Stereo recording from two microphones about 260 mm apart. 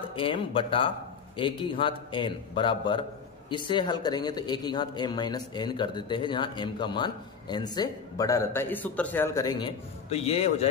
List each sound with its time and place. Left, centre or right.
0.1 s a man's voice: centre